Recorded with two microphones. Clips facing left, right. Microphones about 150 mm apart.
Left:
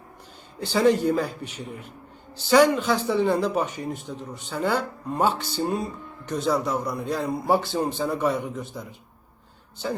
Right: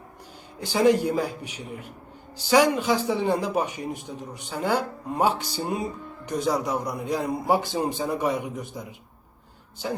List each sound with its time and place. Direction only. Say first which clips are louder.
0.6 s a man's voice: even; 10° right (ahead or behind)